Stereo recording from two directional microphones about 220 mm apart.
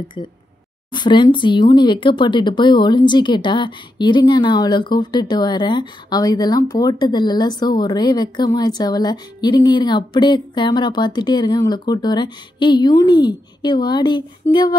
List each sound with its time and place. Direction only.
0.9 s speech: 20° left (ahead or behind)